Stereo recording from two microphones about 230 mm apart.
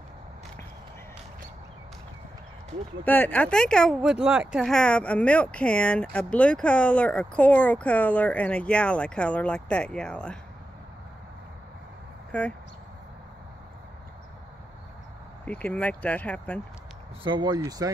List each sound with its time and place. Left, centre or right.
3.1 s speech: centre
12.3 s speech: centre
15.4 s speech: centre
17.2 s speech: centre